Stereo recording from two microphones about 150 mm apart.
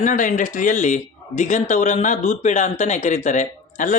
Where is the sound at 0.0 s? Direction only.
60° left (ahead or behind).